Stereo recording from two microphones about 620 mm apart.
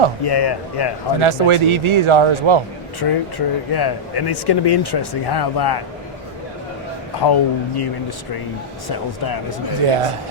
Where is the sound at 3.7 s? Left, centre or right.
Left.